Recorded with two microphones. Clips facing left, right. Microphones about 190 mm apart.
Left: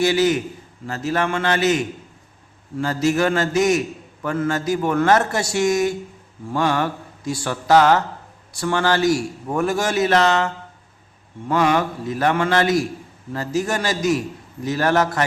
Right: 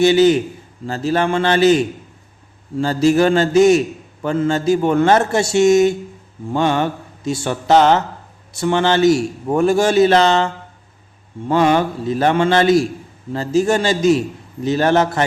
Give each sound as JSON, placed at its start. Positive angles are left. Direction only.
{"t": 0.0, "sound": "a man's voice", "side_deg": -25}